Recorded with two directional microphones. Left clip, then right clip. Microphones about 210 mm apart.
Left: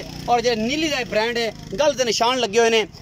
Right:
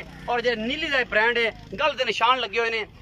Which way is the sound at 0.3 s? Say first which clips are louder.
Left 5 dB; 15° left (ahead or behind).